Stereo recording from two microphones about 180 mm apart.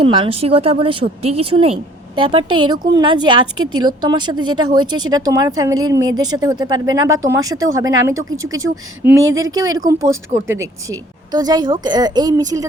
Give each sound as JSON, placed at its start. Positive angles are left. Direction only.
{"t": 0.0, "sound": "a woman's voice", "side_deg": -30}
{"t": 8.5, "sound": "speech", "side_deg": -90}
{"t": 9.6, "sound": "a woman's voice", "side_deg": -20}